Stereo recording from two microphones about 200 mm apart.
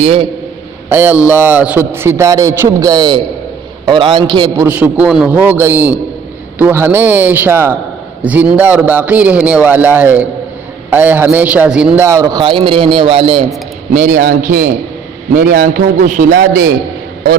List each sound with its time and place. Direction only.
0.0 s a man's voice: 30° right (ahead or behind)
0.9 s a man's voice: 10° right (ahead or behind); by 13.4 s 30° right (ahead or behind)
13.9 s a man's voice: 40° right (ahead or behind)